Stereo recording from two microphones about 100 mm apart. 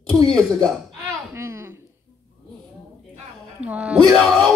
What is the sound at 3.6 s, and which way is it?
Speech, 10° right (ahead or behind).